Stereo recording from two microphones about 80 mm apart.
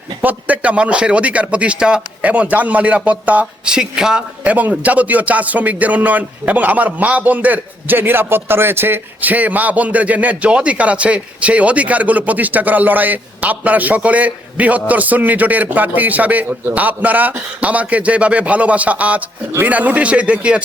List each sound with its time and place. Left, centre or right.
0.2 s speech: right